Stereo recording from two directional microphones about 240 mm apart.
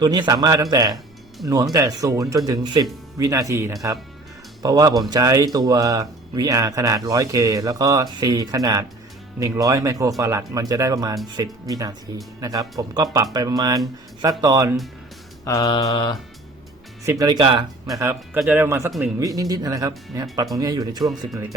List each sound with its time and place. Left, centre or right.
0.0 s speech: centre
15.4 s mantra: centre
17.1 s speech: centre
19.2 s speech: centre